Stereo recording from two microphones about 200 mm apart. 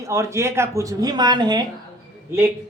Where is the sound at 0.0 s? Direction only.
15° right (ahead or behind).